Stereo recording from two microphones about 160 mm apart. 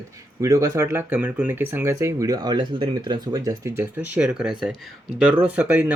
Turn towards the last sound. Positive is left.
turn(degrees=-10)  # may be behind; listen again after turning